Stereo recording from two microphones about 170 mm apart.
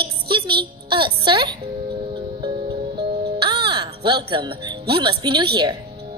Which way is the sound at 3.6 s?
30° right (ahead or behind).